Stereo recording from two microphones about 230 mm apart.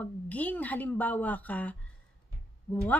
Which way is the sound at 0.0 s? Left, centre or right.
Centre.